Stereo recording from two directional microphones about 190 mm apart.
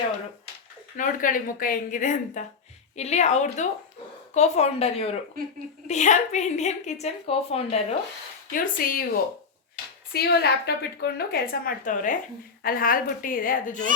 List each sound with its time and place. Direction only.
0.9 s a woman's voice: 45° left (ahead or behind)
8.5 s a woman's voice: 45° left (ahead or behind)
10.1 s a woman's voice: 55° left (ahead or behind)